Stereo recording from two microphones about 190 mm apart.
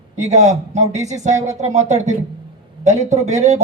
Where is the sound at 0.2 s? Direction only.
40° right (ahead or behind).